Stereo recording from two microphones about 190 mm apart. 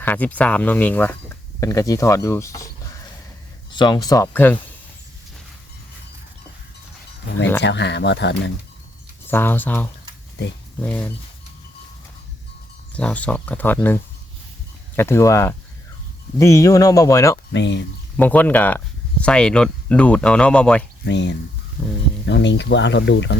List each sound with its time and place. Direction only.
0.0 s speech: 10° left (ahead or behind)
3.8 s speech: 20° left (ahead or behind)
7.6 s speech: 65° left (ahead or behind)
9.2 s speech: 10° left (ahead or behind)
12.9 s speech: 5° left (ahead or behind)
17.5 s speech: 70° left (ahead or behind)
18.2 s speech: 10° left (ahead or behind)
21.0 s speech: 65° left (ahead or behind)